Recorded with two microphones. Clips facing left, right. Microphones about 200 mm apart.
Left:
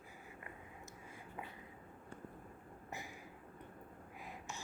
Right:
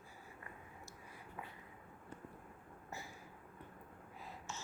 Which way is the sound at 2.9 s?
15° left (ahead or behind).